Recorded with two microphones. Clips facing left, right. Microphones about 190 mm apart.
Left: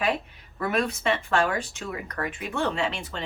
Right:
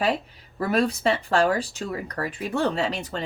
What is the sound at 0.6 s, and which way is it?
Speech, 35° right (ahead or behind).